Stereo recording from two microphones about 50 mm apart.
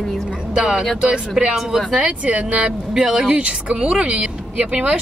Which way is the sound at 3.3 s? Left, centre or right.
Right.